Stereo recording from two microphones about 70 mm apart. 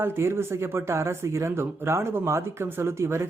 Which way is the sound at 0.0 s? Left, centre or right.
Right.